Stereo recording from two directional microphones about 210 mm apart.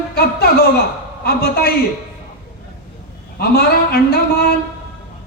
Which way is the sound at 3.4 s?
45° left (ahead or behind).